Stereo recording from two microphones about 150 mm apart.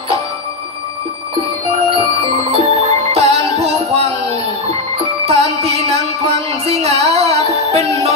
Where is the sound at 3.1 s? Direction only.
45° right (ahead or behind).